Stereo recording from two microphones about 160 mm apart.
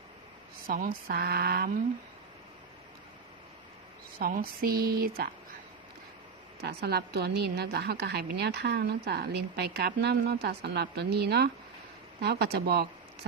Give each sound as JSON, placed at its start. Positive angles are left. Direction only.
{"t": 0.7, "sound": "speech", "side_deg": -65}
{"t": 4.2, "sound": "speech", "side_deg": -65}
{"t": 6.6, "sound": "a woman's voice", "side_deg": -85}